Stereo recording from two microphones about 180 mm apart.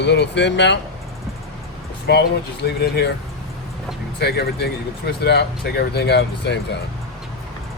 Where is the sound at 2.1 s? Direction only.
65° left (ahead or behind).